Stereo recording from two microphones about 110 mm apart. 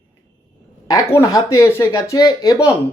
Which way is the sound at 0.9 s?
30° left (ahead or behind).